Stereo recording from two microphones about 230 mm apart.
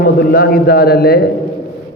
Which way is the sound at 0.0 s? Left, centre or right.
Left.